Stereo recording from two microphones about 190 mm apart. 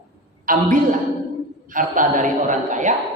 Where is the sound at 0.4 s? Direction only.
45° right (ahead or behind).